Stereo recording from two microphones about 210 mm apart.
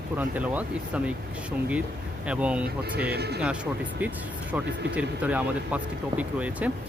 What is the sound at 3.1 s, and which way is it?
Speech, 50° right (ahead or behind).